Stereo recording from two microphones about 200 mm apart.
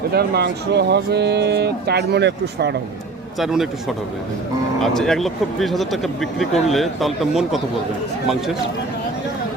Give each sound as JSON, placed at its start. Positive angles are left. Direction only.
{"t": 0.1, "sound": "speech", "side_deg": -55}
{"t": 3.3, "sound": "speech", "side_deg": 0}